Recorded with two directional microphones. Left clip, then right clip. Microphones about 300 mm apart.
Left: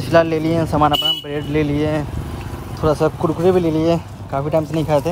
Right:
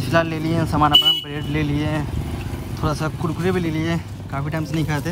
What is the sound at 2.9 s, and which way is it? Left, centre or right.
Speech, left.